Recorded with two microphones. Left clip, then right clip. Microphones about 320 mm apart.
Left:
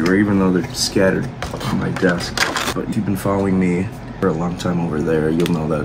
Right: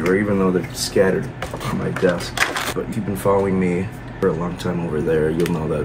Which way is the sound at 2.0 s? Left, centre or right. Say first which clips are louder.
Left 1 dB; centre.